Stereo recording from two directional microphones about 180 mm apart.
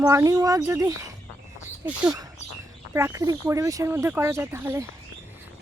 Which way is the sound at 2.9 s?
15° right (ahead or behind).